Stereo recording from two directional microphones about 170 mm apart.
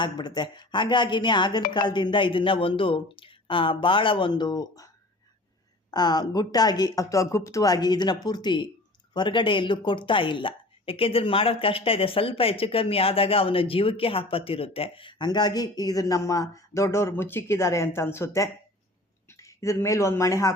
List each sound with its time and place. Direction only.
0.0 s speech: 25° left (ahead or behind)
5.9 s speech: 25° left (ahead or behind)